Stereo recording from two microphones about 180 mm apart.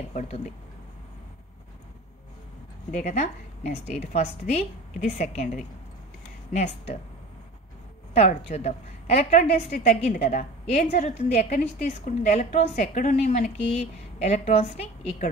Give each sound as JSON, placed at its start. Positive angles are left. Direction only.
{"t": 0.1, "sound": "speech", "side_deg": 40}
{"t": 2.9, "sound": "a woman's voice", "side_deg": 40}
{"t": 8.1, "sound": "a woman's voice", "side_deg": 35}